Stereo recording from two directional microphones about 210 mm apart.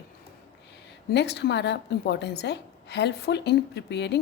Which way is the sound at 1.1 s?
55° left (ahead or behind).